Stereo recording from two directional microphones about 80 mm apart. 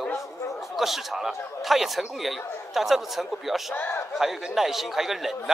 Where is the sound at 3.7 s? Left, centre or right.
Left.